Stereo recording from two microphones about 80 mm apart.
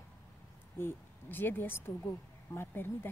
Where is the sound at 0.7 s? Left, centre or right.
Left.